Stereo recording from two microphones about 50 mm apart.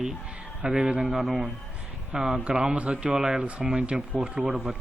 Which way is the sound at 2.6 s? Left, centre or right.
Right.